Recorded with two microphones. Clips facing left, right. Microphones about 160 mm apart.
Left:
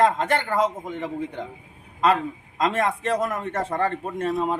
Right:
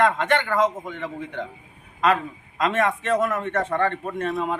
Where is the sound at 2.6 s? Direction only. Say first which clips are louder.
Right 1 dB; 35° left (ahead or behind).